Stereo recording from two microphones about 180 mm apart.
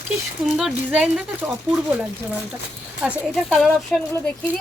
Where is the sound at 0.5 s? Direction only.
5° right (ahead or behind).